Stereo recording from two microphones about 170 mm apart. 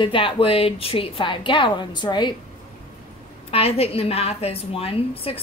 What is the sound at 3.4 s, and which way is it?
Speech, 35° left (ahead or behind).